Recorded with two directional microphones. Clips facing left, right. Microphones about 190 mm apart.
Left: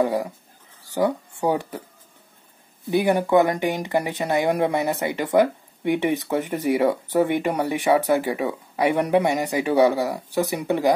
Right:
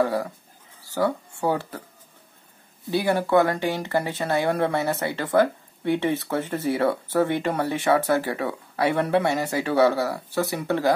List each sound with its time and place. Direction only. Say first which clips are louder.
0.0 s speech: left 1 dB; 15° left (ahead or behind)
2.9 s speech: left 2 dB; 20° left (ahead or behind)